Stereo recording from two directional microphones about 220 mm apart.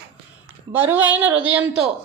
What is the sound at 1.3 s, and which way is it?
Speech, 60° right (ahead or behind).